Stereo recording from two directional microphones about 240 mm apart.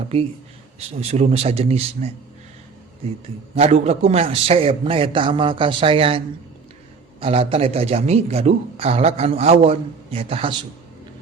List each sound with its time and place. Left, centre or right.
0.8 s a man's voice: right
3.5 s a man's voice: right